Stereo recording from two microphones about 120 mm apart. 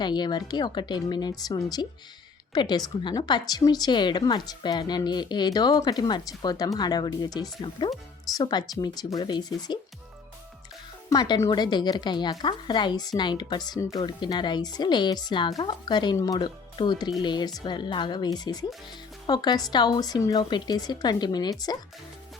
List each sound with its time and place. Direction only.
0.0 s a woman's voice: 35° left (ahead or behind)
11.1 s a woman's voice: 30° left (ahead or behind)